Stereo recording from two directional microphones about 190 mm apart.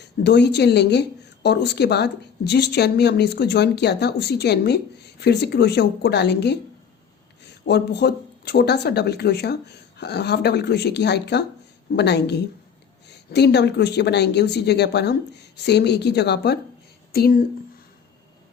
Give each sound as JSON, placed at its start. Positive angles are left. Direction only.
{"t": 0.0, "sound": "speech", "side_deg": 65}
{"t": 7.7, "sound": "speech", "side_deg": 60}